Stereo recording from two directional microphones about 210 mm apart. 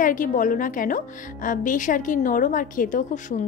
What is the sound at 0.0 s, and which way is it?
A woman's voice, 40° left (ahead or behind).